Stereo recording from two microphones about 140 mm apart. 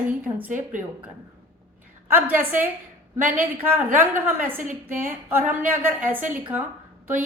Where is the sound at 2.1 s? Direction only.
15° right (ahead or behind).